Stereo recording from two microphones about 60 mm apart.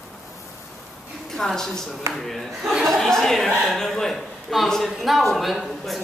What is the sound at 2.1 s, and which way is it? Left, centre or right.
Speech, right.